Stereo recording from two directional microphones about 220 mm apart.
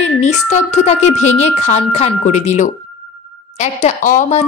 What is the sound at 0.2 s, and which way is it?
A woman's voice, 30° left (ahead or behind).